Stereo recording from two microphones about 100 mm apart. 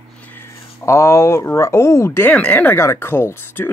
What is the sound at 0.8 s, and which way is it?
Speech, 30° left (ahead or behind).